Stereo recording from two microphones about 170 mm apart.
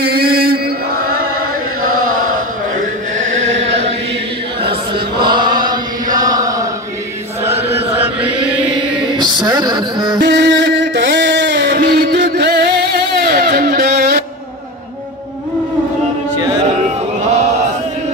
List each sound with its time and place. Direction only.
0.0 s chant: 65° right (ahead or behind); by 3.5 s 45° right (ahead or behind)
3.5 s chant: 90° right
4.6 s chant: 30° right (ahead or behind)
8.0 s chant: 10° right (ahead or behind)
9.1 s music: 25° right (ahead or behind)
10.2 s music: 90° right; by 14.2 s 60° right (ahead or behind)